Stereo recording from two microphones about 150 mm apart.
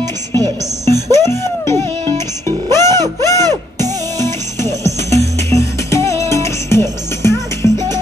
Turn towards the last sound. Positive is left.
turn(degrees=20)  # may be behind; listen again after turning